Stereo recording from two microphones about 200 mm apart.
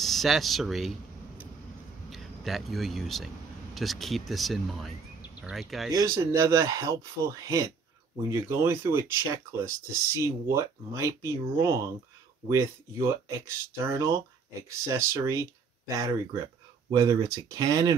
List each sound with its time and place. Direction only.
0.0 s speech: centre (ahead or behind)
2.0 s speech: centre (ahead or behind)
5.9 s speech: 15° right (ahead or behind)
16.9 s speech: 15° right (ahead or behind)